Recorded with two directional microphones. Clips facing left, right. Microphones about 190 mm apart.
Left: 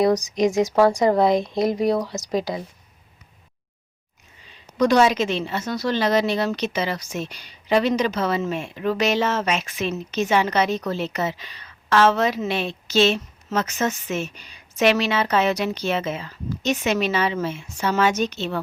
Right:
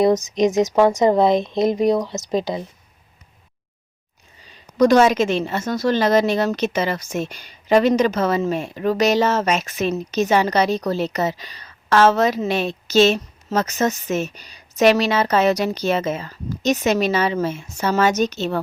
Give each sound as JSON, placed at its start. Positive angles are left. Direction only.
{"t": 0.0, "sound": "speech", "side_deg": -25}
{"t": 4.4, "sound": "a woman's voice", "side_deg": -45}